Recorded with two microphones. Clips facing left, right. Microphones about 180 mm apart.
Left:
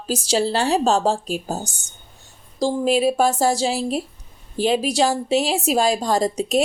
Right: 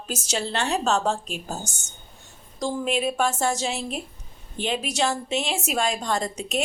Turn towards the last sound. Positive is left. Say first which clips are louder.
# left 7 dB
turn(degrees=35)  # may be behind; listen again after turning